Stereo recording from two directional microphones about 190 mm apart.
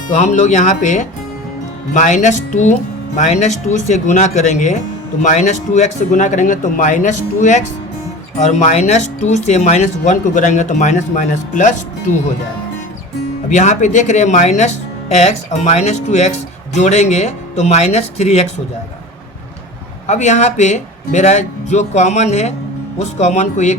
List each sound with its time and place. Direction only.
0.1 s speech: 40° left (ahead or behind)
13.5 s speech: 40° left (ahead or behind)
20.1 s speech: 40° left (ahead or behind)